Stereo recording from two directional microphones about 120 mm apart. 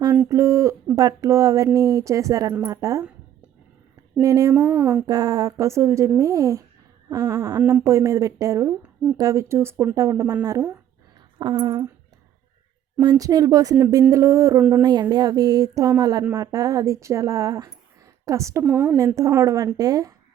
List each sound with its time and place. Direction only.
0.3 s speech: 25° right (ahead or behind)
4.2 s speech: 30° right (ahead or behind)
7.1 s a sound: 30° right (ahead or behind)
7.9 s speech: 25° right (ahead or behind)
11.3 s a sound: 40° right (ahead or behind)
13.0 s speech: 30° right (ahead or behind)
14.8 s a sound: 35° right (ahead or behind)
16.3 s speech: 30° right (ahead or behind)
18.6 s a woman's voice: 10° right (ahead or behind)
18.9 s speech: 30° right (ahead or behind)